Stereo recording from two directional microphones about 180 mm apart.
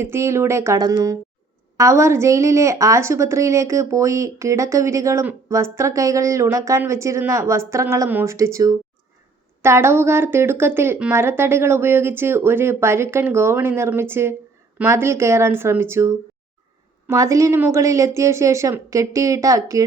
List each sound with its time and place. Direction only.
0.0 s a woman's voice: 15° right (ahead or behind)